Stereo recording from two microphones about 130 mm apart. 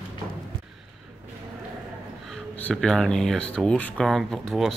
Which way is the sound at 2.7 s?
5° left (ahead or behind).